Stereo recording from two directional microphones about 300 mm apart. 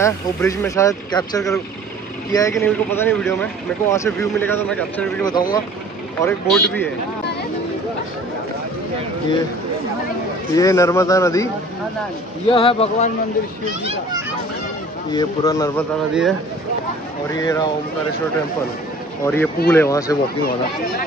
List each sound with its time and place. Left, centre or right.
0.0 s speech: centre
10.5 s speech: centre
12.4 s speech: centre
15.1 s speech: centre
16.1 s speech: centre
17.3 s speech: centre
19.2 s speech: centre